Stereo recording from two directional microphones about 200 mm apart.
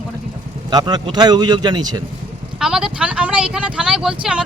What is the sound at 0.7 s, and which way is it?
A man's voice, 20° right (ahead or behind).